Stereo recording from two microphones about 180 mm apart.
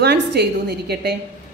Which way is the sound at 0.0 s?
65° right (ahead or behind).